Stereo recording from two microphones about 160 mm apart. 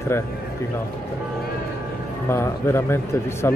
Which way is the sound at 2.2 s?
15° left (ahead or behind).